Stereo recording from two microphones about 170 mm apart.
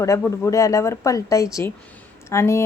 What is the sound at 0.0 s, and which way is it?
A woman's voice, 15° left (ahead or behind).